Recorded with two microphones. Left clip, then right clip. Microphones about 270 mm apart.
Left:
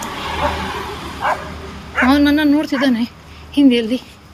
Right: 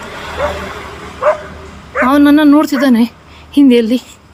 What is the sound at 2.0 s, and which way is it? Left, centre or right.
Speech, centre.